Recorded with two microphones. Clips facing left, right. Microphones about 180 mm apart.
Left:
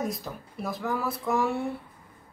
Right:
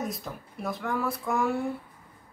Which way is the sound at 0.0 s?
Centre (ahead or behind).